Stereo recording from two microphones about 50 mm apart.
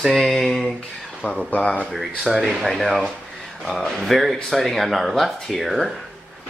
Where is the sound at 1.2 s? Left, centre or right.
Left.